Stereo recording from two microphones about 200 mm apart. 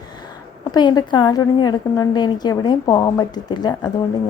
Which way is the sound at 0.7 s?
20° left (ahead or behind).